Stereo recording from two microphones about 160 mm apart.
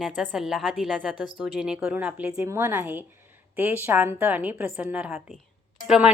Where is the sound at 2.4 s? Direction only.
15° right (ahead or behind).